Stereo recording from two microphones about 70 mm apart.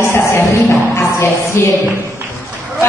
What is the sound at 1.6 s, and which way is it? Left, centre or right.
Speech, left.